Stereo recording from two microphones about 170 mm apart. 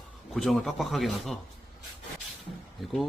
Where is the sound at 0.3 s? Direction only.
Centre (ahead or behind).